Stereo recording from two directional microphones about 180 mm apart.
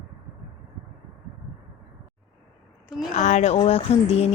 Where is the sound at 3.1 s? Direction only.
40° left (ahead or behind).